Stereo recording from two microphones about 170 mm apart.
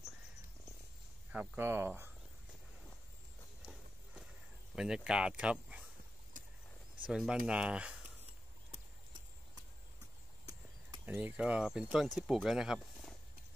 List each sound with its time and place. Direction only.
1.3 s speech: 10° right (ahead or behind)
4.7 s speech: 5° right (ahead or behind)
6.4 s vehicle: 50° right (ahead or behind)
7.1 s speech: 5° right (ahead or behind)
11.1 s speech: 10° right (ahead or behind)